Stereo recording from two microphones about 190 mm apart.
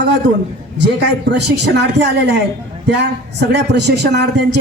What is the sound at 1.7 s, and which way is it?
Speech, 65° right (ahead or behind).